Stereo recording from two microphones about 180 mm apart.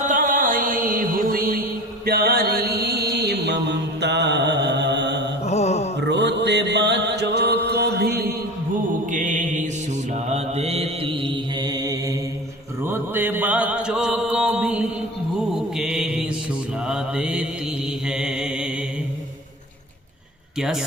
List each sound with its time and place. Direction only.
0.1 s music: 45° right (ahead or behind); by 5.3 s 75° right (ahead or behind)
5.5 s mantra: 35° left (ahead or behind)
6.0 s mantra: 75° right (ahead or behind); by 8.4 s 60° right (ahead or behind)
9.0 s mantra: 45° right (ahead or behind); by 18.7 s 5° right (ahead or behind)
20.6 s speech: 5° right (ahead or behind)